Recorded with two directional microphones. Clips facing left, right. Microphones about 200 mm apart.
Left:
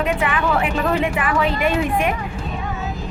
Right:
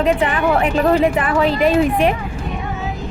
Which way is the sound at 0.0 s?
35° right (ahead or behind).